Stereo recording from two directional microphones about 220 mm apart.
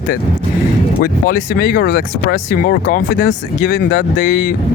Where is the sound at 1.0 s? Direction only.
45° left (ahead or behind).